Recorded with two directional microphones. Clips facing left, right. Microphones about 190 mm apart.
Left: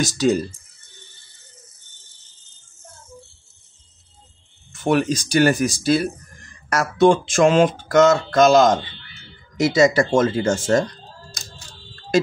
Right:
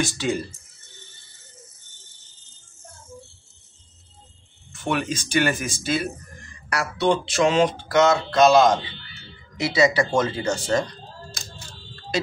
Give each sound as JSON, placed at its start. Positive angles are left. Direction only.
{"t": 0.0, "sound": "speech", "side_deg": 40}
{"t": 4.8, "sound": "speech", "side_deg": 40}
{"t": 6.7, "sound": "a sound", "side_deg": 45}